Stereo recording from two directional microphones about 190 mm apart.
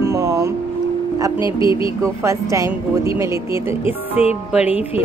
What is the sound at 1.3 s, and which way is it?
Speech, 25° left (ahead or behind).